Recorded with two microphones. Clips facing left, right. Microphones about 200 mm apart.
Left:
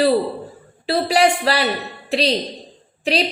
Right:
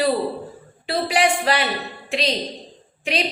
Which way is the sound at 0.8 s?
35° left (ahead or behind).